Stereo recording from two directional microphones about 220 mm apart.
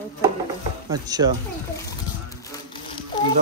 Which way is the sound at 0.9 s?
15° right (ahead or behind).